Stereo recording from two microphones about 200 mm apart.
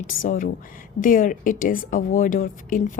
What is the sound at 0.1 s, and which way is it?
A woman's voice, 45° left (ahead or behind).